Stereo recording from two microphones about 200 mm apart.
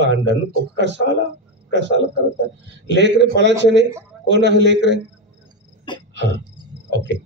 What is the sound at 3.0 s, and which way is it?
A man's voice, 60° right (ahead or behind).